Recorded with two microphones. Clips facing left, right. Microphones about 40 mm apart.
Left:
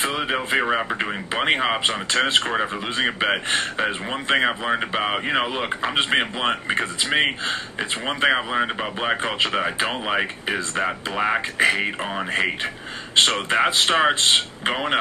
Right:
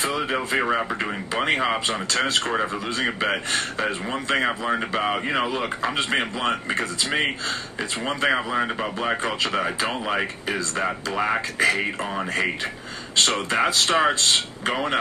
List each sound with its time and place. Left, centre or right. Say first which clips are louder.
0.0 s speech: left 1 dB; left
0.6 s speech: left 1 dB; centre
0.9 s speech: left 1 dB; left
11.5 s speech: left 1 dB; left
13.1 s speech: left 3 dB; left